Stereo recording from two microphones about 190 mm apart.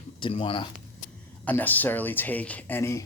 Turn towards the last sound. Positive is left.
turn(degrees=15)  # may be behind; listen again after turning